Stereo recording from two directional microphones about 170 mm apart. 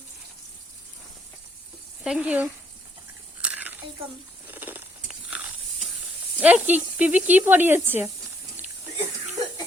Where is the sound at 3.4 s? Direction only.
10° right (ahead or behind).